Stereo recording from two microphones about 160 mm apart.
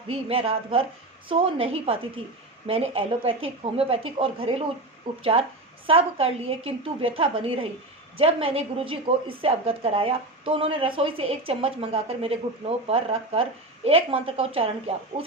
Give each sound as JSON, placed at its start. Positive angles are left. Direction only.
{"t": 0.1, "sound": "a woman's voice", "side_deg": -35}